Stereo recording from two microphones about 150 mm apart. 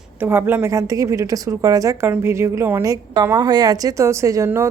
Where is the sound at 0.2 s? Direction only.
15° right (ahead or behind).